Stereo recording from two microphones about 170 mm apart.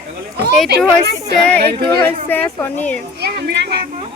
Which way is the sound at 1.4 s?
10° left (ahead or behind).